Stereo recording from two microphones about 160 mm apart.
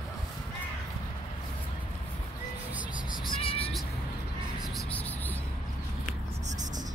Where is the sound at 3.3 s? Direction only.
35° left (ahead or behind).